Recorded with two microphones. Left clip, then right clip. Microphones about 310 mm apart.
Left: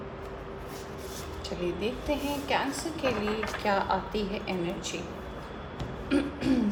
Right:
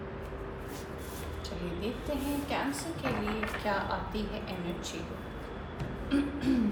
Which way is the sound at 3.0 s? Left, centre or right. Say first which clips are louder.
Left 5 dB; left.